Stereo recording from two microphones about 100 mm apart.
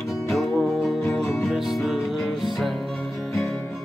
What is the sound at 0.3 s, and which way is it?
Music, centre (ahead or behind).